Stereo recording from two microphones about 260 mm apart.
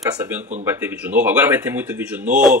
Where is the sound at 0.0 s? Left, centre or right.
Centre.